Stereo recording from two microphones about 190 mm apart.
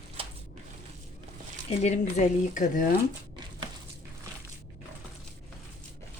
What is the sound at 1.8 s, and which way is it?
Speech, 35° left (ahead or behind).